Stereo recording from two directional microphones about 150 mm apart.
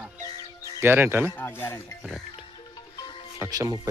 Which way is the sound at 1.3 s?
15° left (ahead or behind).